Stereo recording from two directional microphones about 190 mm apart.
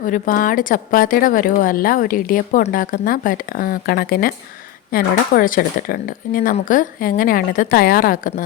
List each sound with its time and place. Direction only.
0.0 s a woman's voice: 45° left (ahead or behind)